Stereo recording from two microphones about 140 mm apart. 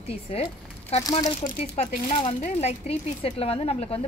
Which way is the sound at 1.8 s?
55° left (ahead or behind).